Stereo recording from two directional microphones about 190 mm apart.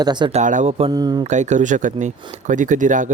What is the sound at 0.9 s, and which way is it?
Speech, 20° right (ahead or behind).